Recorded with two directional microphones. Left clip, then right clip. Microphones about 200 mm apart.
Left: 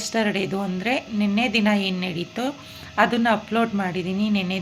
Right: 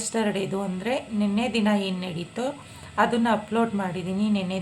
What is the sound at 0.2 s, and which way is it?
A woman's voice, 5° left (ahead or behind).